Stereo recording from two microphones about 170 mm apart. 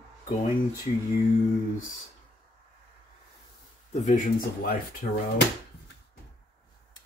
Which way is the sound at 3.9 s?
40° left (ahead or behind).